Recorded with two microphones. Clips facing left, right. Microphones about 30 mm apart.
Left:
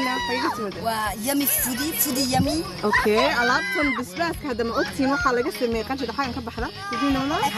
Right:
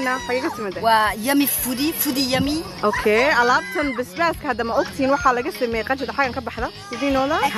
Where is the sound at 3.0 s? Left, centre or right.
Right.